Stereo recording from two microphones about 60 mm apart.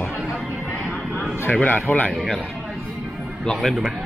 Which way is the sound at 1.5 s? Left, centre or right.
Left.